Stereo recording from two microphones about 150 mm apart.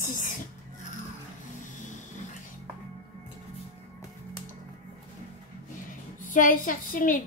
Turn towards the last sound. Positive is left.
turn(degrees=65)  # may be behind; listen again after turning